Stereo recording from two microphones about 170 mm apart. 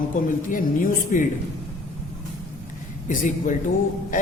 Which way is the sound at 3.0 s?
50° left (ahead or behind).